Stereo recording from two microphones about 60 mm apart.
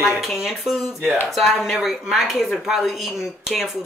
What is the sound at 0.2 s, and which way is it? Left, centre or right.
Speech, centre.